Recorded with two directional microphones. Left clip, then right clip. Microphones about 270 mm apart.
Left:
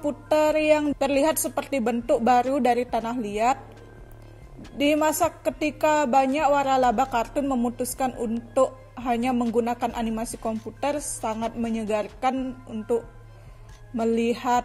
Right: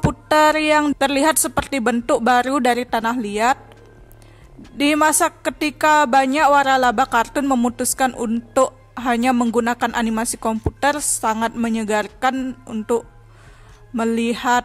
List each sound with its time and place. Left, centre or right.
0.3 s a woman's voice: right
4.7 s a woman's voice: right